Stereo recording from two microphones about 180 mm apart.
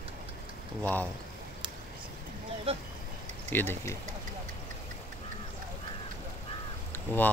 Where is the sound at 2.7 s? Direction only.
35° right (ahead or behind).